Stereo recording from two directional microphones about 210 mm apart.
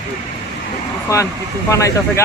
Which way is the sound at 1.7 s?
15° left (ahead or behind).